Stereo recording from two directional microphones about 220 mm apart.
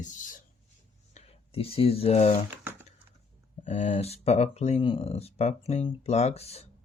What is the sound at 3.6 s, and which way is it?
Speech, 30° left (ahead or behind).